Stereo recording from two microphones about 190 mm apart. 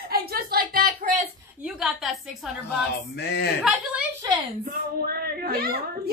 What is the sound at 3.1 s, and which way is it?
Speech, 65° left (ahead or behind).